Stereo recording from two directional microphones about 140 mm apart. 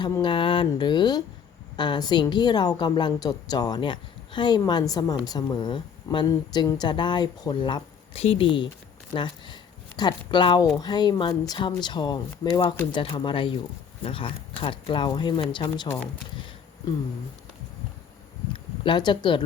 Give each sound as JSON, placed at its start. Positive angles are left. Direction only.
{"t": 0.2, "sound": "a woman's voice", "side_deg": 35}
{"t": 18.5, "sound": "speech", "side_deg": 35}